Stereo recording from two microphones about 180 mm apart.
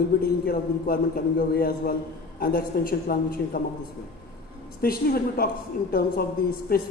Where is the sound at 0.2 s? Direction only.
55° left (ahead or behind).